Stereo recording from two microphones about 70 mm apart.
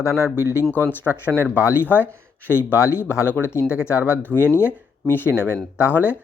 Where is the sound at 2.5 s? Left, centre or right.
Left.